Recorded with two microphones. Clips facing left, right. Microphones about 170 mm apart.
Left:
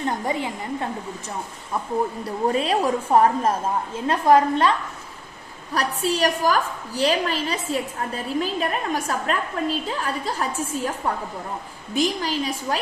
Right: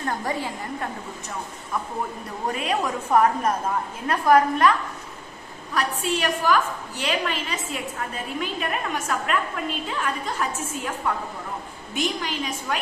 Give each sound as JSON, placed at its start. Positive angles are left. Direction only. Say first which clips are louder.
{"t": 0.0, "sound": "a woman's voice", "louder": "left 2 dB", "side_deg": 20}
{"t": 2.5, "sound": "a woman's voice", "louder": "left 3 dB", "side_deg": 30}
{"t": 5.8, "sound": "a woman's voice", "louder": "left 3 dB", "side_deg": 35}
{"t": 11.9, "sound": "a woman's voice", "louder": "left 4 dB", "side_deg": 35}